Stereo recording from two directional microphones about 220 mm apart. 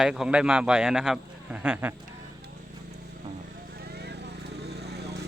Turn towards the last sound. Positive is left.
turn(degrees=-50)  # may be behind; listen again after turning